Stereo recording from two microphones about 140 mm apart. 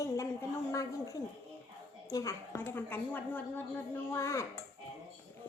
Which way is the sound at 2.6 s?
15° left (ahead or behind).